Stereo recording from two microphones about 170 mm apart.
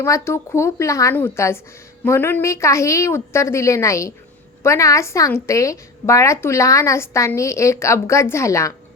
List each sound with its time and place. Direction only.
0.0 s a woman's voice: 15° left (ahead or behind)